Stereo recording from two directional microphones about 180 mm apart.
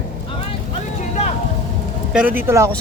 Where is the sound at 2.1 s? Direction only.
5° right (ahead or behind).